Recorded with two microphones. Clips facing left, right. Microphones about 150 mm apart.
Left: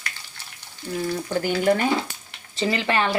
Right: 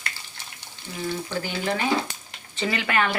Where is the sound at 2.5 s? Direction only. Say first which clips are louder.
Left 3 dB; 30° left (ahead or behind).